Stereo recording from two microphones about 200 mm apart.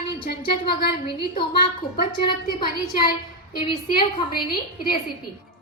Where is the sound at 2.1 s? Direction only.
25° left (ahead or behind).